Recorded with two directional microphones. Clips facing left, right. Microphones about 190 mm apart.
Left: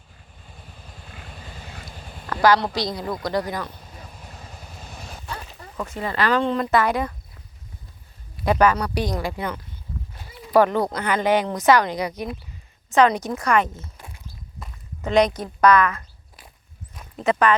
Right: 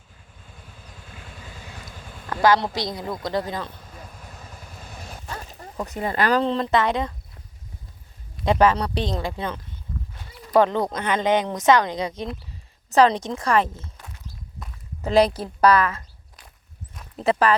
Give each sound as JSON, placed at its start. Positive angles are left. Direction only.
{"t": 2.3, "sound": "a woman's voice", "side_deg": -20}
{"t": 4.1, "sound": "vehicle", "side_deg": -50}
{"t": 5.9, "sound": "speech", "side_deg": -45}
{"t": 8.4, "sound": "speech", "side_deg": -25}
{"t": 10.2, "sound": "horse", "side_deg": 10}
{"t": 10.6, "sound": "speech", "side_deg": -20}
{"t": 13.9, "sound": "a sound", "side_deg": 10}
{"t": 15.0, "sound": "speech", "side_deg": -30}
{"t": 16.9, "sound": "a sound", "side_deg": 0}